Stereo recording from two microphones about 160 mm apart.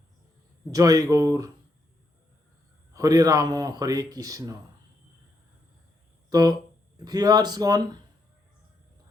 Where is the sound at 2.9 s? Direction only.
20° right (ahead or behind).